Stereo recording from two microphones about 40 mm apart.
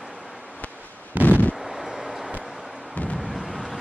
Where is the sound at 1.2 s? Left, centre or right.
Right.